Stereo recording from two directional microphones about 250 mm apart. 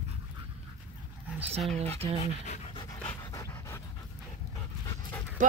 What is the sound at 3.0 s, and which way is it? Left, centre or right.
Dog, centre.